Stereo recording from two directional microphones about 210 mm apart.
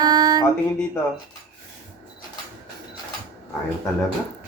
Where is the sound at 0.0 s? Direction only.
20° right (ahead or behind).